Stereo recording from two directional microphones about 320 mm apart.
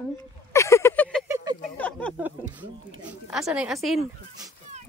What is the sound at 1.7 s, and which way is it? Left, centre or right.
Speech, centre.